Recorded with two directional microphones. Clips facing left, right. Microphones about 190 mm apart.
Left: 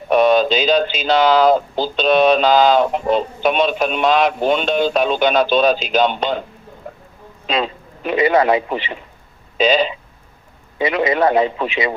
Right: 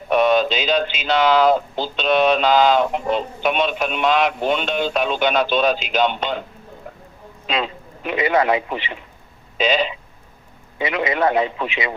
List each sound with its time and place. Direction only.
0.1 s speech: 35° left (ahead or behind)
7.4 s a man's voice: 35° left (ahead or behind)